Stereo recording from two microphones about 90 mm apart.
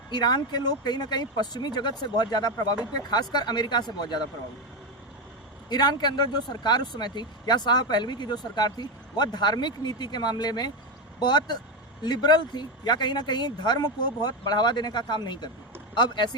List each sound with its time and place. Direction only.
0.1 s speech: 50° left (ahead or behind)
5.6 s speech: 50° left (ahead or behind)